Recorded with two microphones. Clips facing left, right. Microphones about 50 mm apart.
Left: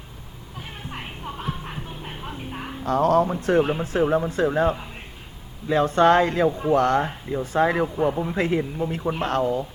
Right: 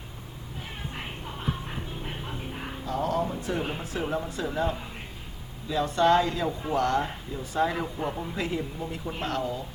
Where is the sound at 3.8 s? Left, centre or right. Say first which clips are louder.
Left 9 dB; left.